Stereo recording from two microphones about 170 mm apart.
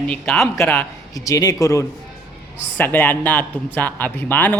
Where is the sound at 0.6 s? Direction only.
15° left (ahead or behind).